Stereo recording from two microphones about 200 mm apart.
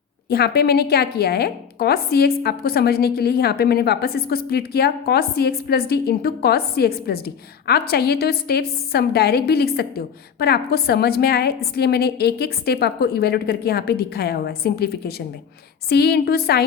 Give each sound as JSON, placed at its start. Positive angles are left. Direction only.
{"t": 0.3, "sound": "a woman's voice", "side_deg": 50}